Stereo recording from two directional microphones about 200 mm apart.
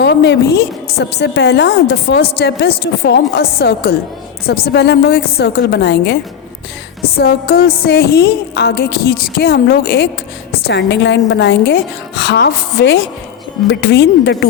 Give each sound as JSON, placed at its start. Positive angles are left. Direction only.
{"t": 0.0, "sound": "a woman's voice", "side_deg": 55}
{"t": 7.2, "sound": "music", "side_deg": 50}
{"t": 10.7, "sound": "a woman's voice", "side_deg": 60}